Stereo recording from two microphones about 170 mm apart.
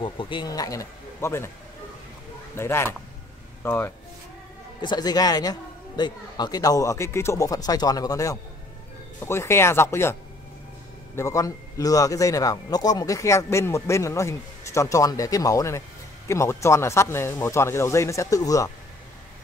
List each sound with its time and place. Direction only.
0.0 s speech: 30° left (ahead or behind)
2.5 s speech: 15° left (ahead or behind)
4.8 s speech: 25° left (ahead or behind)
11.1 s speech: 20° left (ahead or behind)